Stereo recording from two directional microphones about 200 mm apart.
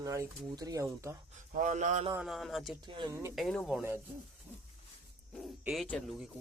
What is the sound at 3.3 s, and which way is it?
Speech, centre (ahead or behind).